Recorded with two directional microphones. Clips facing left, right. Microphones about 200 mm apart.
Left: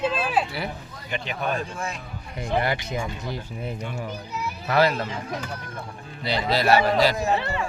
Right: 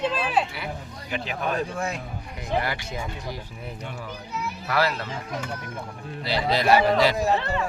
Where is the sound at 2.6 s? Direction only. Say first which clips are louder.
Left 6 dB; 20° left (ahead or behind).